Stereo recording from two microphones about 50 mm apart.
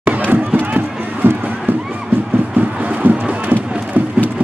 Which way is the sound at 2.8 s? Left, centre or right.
Right.